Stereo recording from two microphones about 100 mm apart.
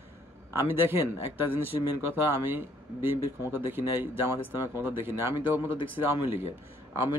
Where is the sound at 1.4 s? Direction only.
20° right (ahead or behind).